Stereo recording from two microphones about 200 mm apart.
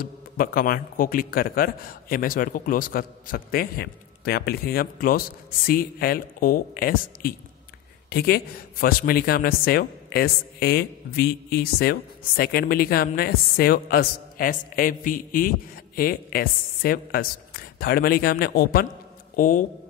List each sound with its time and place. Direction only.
0.0 s speech: 45° left (ahead or behind)